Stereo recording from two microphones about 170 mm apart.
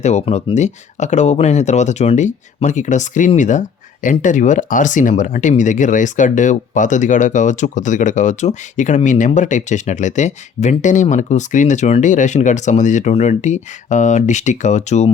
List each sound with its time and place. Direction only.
0.0 s speech: 40° left (ahead or behind)